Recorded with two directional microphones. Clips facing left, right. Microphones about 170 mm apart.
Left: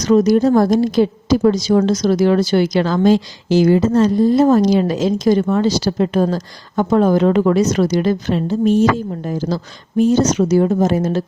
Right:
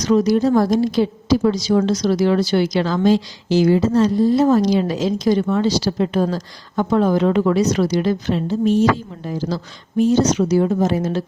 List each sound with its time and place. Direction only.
0.0 s a woman's voice: 45° left (ahead or behind)